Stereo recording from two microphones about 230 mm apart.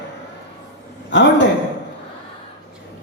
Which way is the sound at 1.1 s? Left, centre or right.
Left.